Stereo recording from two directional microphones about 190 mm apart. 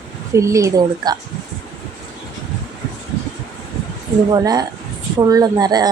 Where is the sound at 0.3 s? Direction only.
15° right (ahead or behind).